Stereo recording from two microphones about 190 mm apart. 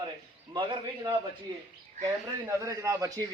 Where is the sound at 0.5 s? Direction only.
25° right (ahead or behind).